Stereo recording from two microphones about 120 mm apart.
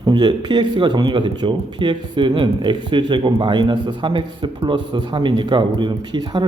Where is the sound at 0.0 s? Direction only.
40° right (ahead or behind).